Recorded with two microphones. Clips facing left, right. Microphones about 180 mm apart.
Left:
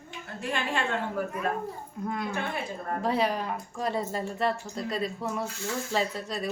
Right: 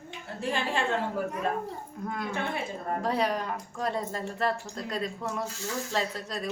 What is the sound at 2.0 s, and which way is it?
A woman's voice, centre (ahead or behind).